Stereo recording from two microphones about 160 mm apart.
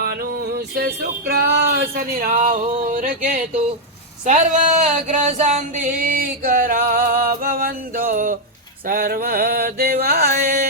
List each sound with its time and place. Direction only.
0.5 s music: 85° right
1.8 s singing: 65° right (ahead or behind)
8.9 s mantra: 60° right (ahead or behind)